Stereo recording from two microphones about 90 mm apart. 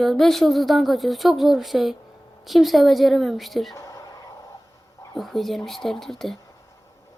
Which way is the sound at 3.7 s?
35° left (ahead or behind).